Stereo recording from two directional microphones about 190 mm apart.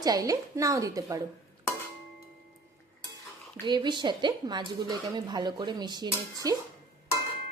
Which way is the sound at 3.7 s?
25° right (ahead or behind).